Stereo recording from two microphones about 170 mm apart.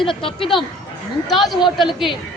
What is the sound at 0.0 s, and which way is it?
Speech, 30° left (ahead or behind).